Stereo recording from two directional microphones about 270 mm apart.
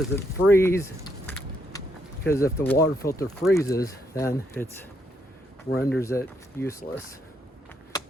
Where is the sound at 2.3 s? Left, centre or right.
Centre.